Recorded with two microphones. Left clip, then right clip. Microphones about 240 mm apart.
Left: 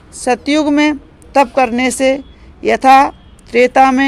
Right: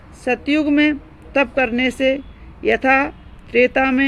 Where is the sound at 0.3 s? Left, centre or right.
Centre.